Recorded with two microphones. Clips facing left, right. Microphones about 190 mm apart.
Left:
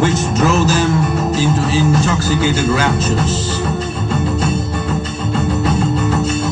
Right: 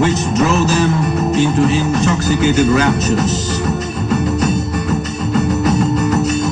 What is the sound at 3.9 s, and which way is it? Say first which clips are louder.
Music: right 2 dB; 30° left (ahead or behind).